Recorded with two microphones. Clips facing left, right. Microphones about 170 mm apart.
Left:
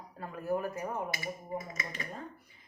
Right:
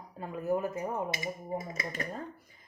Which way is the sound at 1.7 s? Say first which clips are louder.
Right 4 dB; 35° right (ahead or behind).